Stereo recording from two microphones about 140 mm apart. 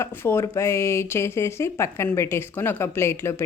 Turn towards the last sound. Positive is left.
turn(degrees=20)  # may be behind; listen again after turning